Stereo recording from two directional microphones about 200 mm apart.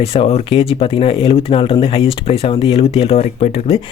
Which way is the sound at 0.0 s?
30° left (ahead or behind).